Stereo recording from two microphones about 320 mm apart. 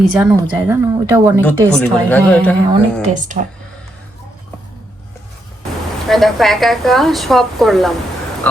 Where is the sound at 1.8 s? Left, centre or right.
Centre.